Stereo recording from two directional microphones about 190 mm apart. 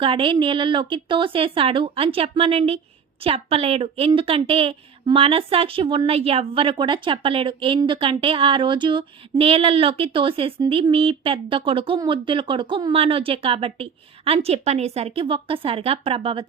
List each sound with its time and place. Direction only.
0.0 s a woman's voice: 25° right (ahead or behind)